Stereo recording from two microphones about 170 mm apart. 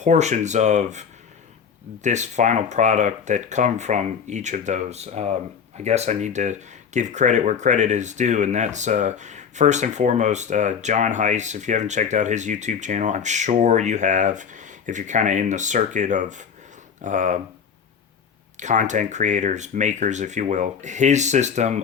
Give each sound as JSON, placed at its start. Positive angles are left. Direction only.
{"t": 0.0, "sound": "speech", "side_deg": -45}
{"t": 2.0, "sound": "speech", "side_deg": -45}
{"t": 18.5, "sound": "speech", "side_deg": -45}